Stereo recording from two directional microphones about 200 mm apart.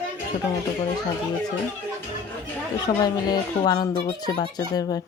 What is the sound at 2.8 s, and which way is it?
Speech, 20° left (ahead or behind).